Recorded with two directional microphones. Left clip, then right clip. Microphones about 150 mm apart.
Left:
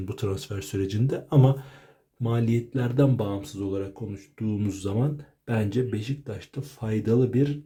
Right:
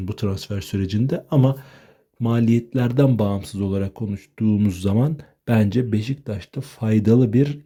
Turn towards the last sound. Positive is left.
turn(degrees=-45)  # may be behind; listen again after turning